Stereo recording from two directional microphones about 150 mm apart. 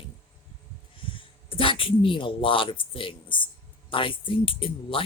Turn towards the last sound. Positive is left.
turn(degrees=35)  # may be behind; listen again after turning